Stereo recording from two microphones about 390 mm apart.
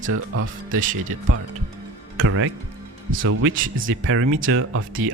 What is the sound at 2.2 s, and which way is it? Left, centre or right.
Speech, right.